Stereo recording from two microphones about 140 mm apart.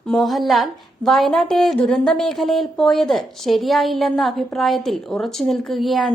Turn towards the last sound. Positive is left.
turn(degrees=0)  # may be behind; listen again after turning